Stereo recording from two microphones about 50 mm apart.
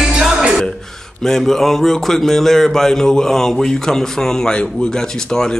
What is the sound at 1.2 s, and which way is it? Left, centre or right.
Speech, centre.